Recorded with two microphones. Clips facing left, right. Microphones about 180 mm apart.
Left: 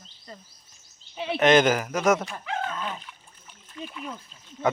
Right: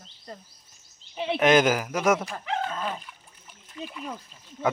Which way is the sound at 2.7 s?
40° right (ahead or behind).